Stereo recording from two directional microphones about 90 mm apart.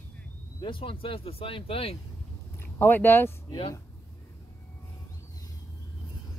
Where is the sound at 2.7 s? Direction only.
20° left (ahead or behind).